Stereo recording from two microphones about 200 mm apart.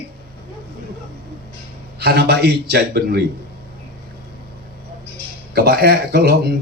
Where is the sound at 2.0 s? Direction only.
55° right (ahead or behind).